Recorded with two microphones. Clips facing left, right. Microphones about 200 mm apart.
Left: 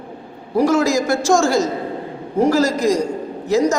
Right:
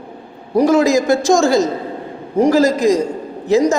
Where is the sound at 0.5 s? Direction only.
20° right (ahead or behind).